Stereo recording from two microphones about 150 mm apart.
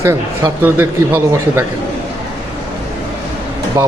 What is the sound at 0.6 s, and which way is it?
Speech, 15° right (ahead or behind).